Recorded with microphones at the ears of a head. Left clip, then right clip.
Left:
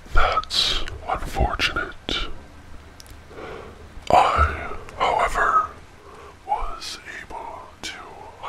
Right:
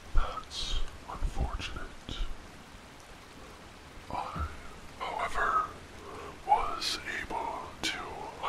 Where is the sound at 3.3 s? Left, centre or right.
Left.